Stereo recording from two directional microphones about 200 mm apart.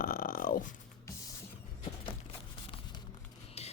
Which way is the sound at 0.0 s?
45° left (ahead or behind).